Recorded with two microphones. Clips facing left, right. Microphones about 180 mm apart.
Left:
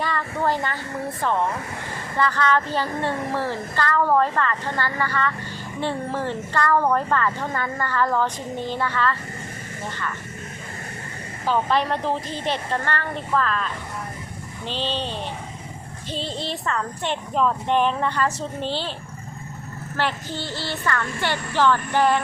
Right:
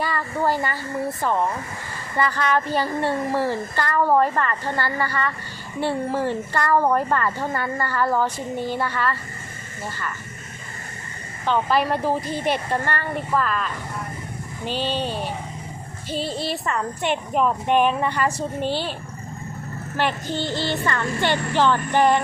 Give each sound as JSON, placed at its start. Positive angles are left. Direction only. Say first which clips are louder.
{"t": 0.0, "sound": "a woman's voice", "louder": "right 1 dB", "side_deg": -5}
{"t": 2.1, "sound": "a woman's voice", "louder": "even", "side_deg": -10}
{"t": 11.4, "sound": "speech", "louder": "right 1 dB", "side_deg": 5}
{"t": 11.8, "sound": "a woman's voice", "louder": "right 2 dB", "side_deg": -10}
{"t": 20.0, "sound": "a woman's voice", "louder": "right 3 dB", "side_deg": -15}